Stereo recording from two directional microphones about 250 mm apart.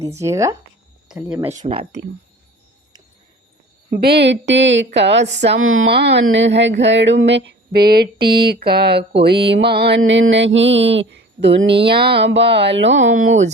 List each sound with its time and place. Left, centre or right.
0.0 s speech: centre
1.5 s speech: right
4.0 s speech: right